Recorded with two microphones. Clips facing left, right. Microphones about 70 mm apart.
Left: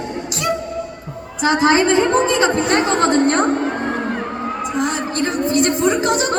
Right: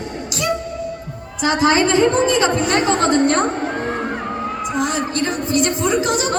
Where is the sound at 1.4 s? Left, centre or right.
Left.